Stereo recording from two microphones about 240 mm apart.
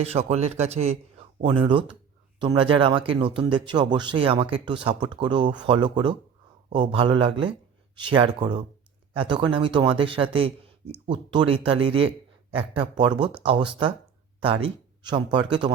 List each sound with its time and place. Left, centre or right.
0.0 s speech: right